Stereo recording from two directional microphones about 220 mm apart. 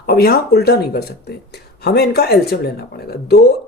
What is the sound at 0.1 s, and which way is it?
Speech, 45° left (ahead or behind).